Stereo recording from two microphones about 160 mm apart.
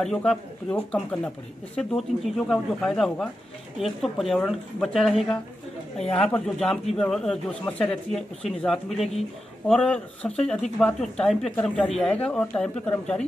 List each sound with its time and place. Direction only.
0.0 s speech: 5° left (ahead or behind)